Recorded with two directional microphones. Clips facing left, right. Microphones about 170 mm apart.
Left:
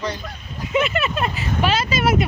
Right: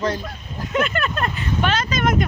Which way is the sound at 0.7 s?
5° left (ahead or behind).